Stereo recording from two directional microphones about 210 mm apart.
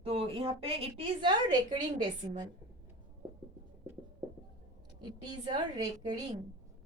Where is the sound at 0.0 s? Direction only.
25° right (ahead or behind).